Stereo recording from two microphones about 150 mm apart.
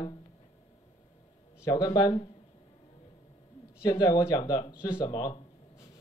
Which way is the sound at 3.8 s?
25° left (ahead or behind).